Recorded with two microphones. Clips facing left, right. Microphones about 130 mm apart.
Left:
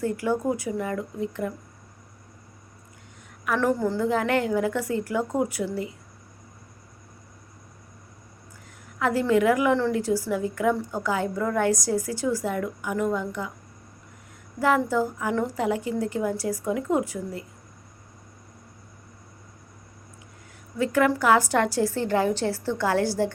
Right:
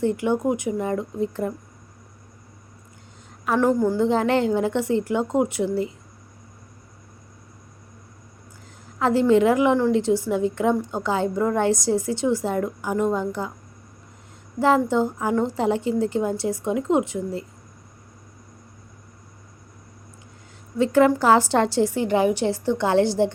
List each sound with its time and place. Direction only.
0.0 s a woman's voice: 25° right (ahead or behind)
3.4 s a woman's voice: 25° right (ahead or behind)
8.9 s a woman's voice: 30° right (ahead or behind)
14.8 s a woman's voice: 25° right (ahead or behind)
20.7 s a woman's voice: 30° right (ahead or behind)